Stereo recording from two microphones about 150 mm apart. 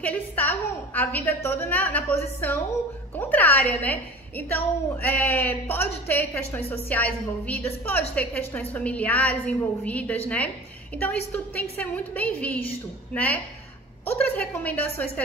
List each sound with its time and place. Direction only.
0.0 s a woman's voice: 10° left (ahead or behind)